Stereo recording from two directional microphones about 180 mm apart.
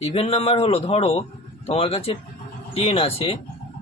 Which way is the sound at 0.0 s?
30° left (ahead or behind).